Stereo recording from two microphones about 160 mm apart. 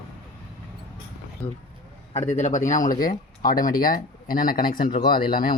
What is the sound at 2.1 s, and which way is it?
A man's voice, 45° left (ahead or behind).